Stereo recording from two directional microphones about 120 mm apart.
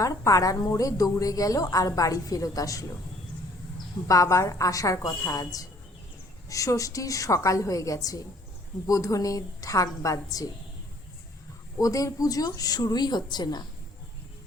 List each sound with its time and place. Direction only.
0.0 s a woman's voice: 30° left (ahead or behind)
4.1 s a woman's voice: 25° left (ahead or behind)
11.8 s speech: 30° left (ahead or behind)